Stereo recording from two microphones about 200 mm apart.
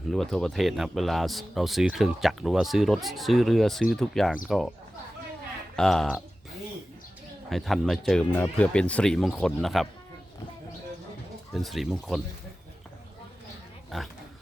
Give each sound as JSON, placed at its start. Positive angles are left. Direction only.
{"t": 0.1, "sound": "speech", "side_deg": 0}
{"t": 5.7, "sound": "speech", "side_deg": 0}
{"t": 7.5, "sound": "speech", "side_deg": 0}
{"t": 11.5, "sound": "speech", "side_deg": 0}